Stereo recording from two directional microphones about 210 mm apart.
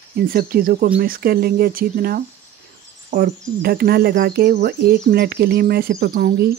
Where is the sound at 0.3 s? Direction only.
45° right (ahead or behind).